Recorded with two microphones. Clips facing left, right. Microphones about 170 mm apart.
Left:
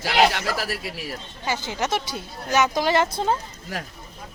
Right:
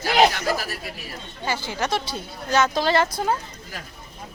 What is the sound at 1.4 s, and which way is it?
Speech, 20° left (ahead or behind).